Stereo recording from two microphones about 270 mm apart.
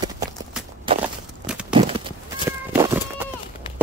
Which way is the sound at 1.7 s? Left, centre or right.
Centre.